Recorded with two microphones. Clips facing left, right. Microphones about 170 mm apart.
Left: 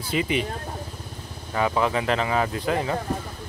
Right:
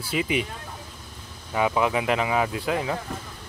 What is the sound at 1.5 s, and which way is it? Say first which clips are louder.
Speech: even; 10° right (ahead or behind).